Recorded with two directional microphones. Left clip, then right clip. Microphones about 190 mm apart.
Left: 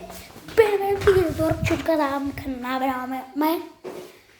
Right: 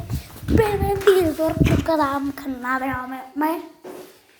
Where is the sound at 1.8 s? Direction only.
Centre (ahead or behind).